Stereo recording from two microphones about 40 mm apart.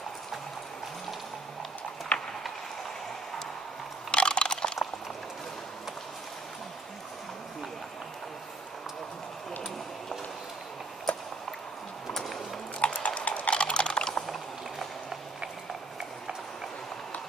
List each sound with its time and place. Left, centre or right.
2.1 s clip-clop: left
4.1 s typing: left
12.8 s horse: left
14.2 s a sound: centre